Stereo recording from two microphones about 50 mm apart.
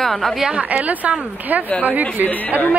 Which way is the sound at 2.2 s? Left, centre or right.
Left.